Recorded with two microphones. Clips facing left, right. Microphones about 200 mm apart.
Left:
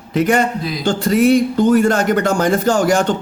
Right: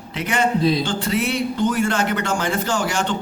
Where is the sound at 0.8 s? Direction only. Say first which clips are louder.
Left 9 dB; 40° left (ahead or behind).